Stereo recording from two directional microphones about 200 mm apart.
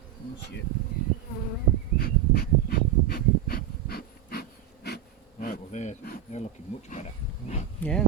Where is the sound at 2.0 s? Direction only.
50° left (ahead or behind).